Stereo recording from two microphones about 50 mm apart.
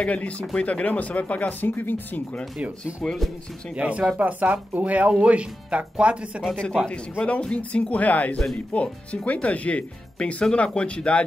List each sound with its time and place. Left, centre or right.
0.0 s speech: left
1.7 s speech: left
3.7 s speech: right
6.9 s speech: left